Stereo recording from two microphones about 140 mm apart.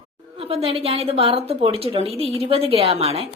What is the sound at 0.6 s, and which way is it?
A woman's voice, 45° right (ahead or behind).